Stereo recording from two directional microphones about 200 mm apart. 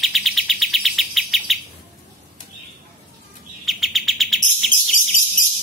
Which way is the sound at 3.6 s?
Centre (ahead or behind).